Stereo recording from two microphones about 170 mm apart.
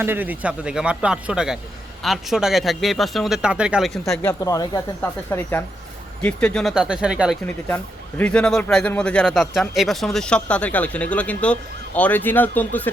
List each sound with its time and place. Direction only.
0.0 s a man's voice: 10° right (ahead or behind)
4.2 s a man's voice: 15° left (ahead or behind); by 7.3 s 5° right (ahead or behind)
8.2 s speech: 5° left (ahead or behind)